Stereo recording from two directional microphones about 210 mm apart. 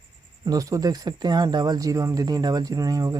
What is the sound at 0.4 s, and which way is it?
Speech, 15° right (ahead or behind).